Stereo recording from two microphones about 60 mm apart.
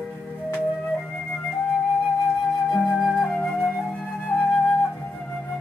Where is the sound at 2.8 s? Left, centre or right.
Centre.